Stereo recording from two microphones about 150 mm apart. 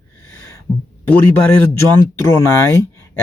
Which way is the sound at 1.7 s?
15° left (ahead or behind).